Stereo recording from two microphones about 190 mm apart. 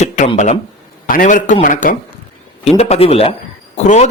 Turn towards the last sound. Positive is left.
turn(degrees=40)  # may be behind; listen again after turning